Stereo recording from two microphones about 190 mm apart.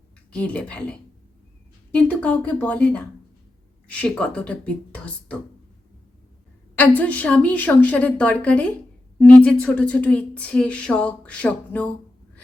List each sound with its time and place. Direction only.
0.3 s speech: 5° left (ahead or behind)
6.7 s speech: 10° left (ahead or behind)